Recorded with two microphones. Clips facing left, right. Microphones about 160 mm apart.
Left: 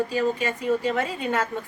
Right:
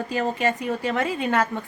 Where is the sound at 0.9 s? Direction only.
70° right (ahead or behind).